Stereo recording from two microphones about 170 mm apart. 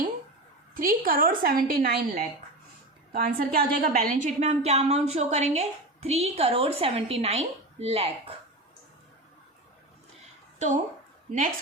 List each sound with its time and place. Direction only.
0.7 s a woman's voice: 55° right (ahead or behind); by 8.4 s 35° right (ahead or behind)
10.6 s speech: 40° right (ahead or behind)